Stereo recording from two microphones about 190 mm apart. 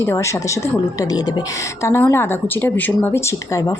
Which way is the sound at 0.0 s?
15° left (ahead or behind).